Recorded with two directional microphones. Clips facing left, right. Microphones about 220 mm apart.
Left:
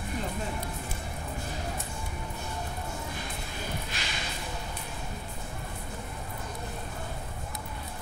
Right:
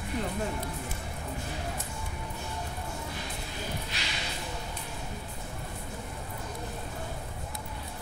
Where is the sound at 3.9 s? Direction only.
50° left (ahead or behind).